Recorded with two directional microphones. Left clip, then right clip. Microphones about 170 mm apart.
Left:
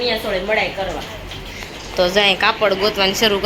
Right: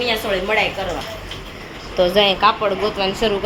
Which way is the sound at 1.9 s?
20° right (ahead or behind).